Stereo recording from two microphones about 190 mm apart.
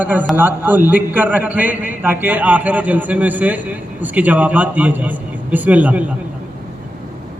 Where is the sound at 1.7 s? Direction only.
45° left (ahead or behind).